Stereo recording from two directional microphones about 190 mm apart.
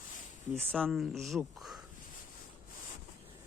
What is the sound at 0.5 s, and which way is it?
Speech, 5° left (ahead or behind).